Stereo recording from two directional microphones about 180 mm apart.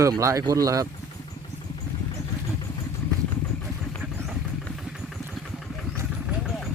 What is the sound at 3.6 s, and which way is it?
Vehicle, 5° left (ahead or behind).